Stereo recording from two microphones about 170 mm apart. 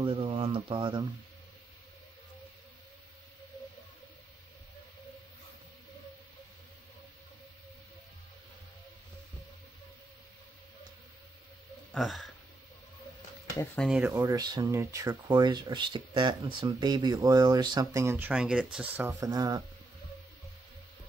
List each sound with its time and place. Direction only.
0.0 s speech: 35° right (ahead or behind)
11.9 s speech: centre (ahead or behind)
13.7 s speech: 5° right (ahead or behind)
14.1 s speech: 20° right (ahead or behind)